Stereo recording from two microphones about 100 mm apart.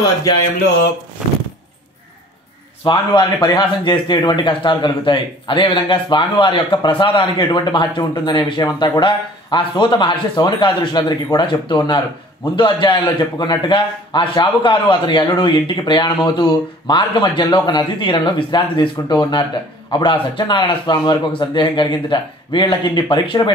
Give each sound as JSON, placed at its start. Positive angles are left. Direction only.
{"t": 2.8, "sound": "a man's voice", "side_deg": 50}